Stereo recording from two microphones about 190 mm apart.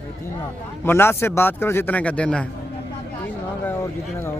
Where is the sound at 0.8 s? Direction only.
10° left (ahead or behind).